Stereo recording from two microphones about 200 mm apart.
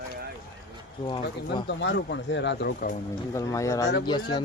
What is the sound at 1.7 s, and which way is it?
Speech, 60° left (ahead or behind).